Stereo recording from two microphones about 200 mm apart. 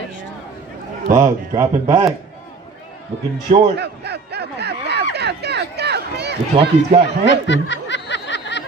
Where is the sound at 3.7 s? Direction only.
55° right (ahead or behind).